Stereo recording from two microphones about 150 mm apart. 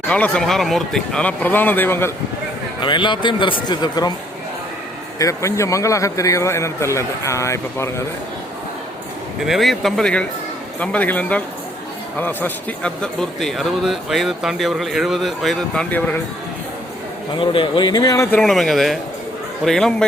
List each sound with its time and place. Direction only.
0.1 s speech: 5° left (ahead or behind)
2.8 s a man's voice: 30° left (ahead or behind)
5.2 s a man's voice: 20° left (ahead or behind)
9.4 s speech: centre (ahead or behind)
17.3 s a man's voice: 35° left (ahead or behind)
18.3 s speech: 5° left (ahead or behind)